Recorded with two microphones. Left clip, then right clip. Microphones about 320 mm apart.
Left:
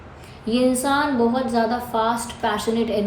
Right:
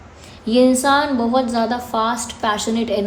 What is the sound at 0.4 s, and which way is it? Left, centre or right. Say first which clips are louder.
A woman's voice: right 6 dB; right.